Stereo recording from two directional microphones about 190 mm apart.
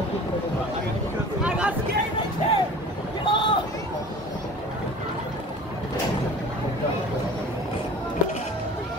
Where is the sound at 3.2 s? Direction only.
25° left (ahead or behind).